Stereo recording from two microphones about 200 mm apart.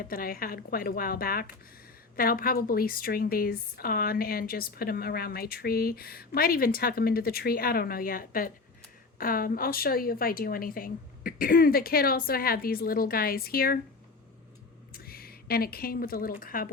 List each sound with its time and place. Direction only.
0.0 s a woman's voice: 45° left (ahead or behind)
14.9 s speech: 50° left (ahead or behind)